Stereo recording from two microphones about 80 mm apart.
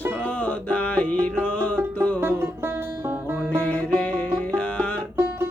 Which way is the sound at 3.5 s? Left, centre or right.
Centre.